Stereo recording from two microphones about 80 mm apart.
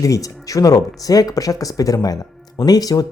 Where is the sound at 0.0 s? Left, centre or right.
Left.